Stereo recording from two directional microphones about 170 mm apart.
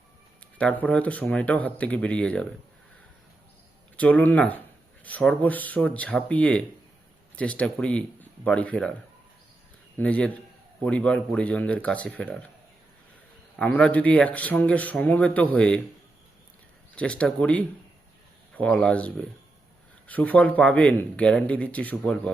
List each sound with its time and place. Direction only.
0.6 s speech: 10° left (ahead or behind)
3.9 s speech: 10° left (ahead or behind)
10.0 s speech: 5° left (ahead or behind)
13.6 s speech: 5° left (ahead or behind)
16.9 s speech: 5° left (ahead or behind)